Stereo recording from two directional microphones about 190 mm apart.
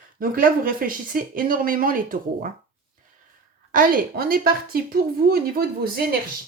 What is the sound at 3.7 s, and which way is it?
Speech, 45° right (ahead or behind).